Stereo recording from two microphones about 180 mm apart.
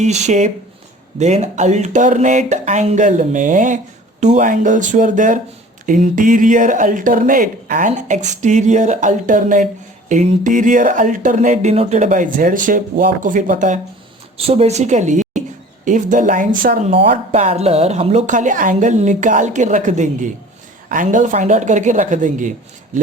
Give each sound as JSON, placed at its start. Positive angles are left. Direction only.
{"t": 0.0, "sound": "a woman's voice", "side_deg": -40}
{"t": 14.3, "sound": "a woman's voice", "side_deg": -35}